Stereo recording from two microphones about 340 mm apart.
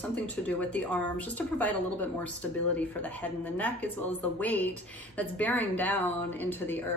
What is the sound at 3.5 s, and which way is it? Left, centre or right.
A woman's voice, centre.